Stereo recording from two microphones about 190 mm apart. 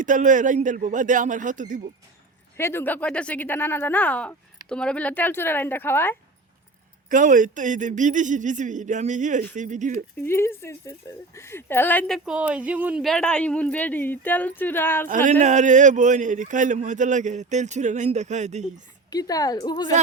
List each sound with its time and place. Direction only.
0.0 s speech: 40° right (ahead or behind)
2.6 s speech: 10° left (ahead or behind)
7.1 s speech: 45° right (ahead or behind)
10.2 s speech: 15° left (ahead or behind)
15.0 s speech: 40° right (ahead or behind)
19.1 s a woman's voice: 20° left (ahead or behind)